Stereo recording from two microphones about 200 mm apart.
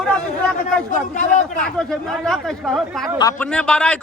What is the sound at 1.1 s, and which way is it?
Speech, 40° left (ahead or behind).